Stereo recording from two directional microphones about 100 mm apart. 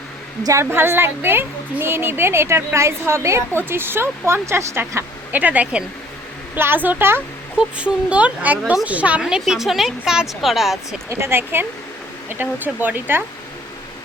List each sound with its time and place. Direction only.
0.4 s a woman's voice: 30° right (ahead or behind); by 10.8 s centre (ahead or behind)
11.1 s a woman's voice: 25° right (ahead or behind)